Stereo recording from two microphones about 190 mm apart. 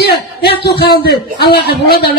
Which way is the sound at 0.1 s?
55° left (ahead or behind).